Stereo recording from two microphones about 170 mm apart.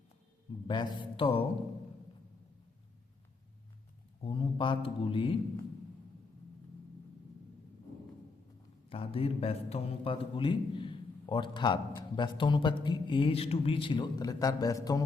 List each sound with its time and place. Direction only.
0.7 s a man's voice: 30° left (ahead or behind)
4.2 s a man's voice: 30° left (ahead or behind)
8.9 s a man's voice: 35° left (ahead or behind)